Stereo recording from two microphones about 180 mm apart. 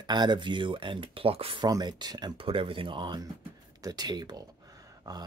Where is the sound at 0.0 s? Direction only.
25° right (ahead or behind).